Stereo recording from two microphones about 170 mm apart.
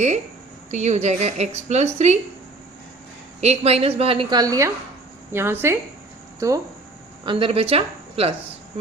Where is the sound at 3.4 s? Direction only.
40° right (ahead or behind).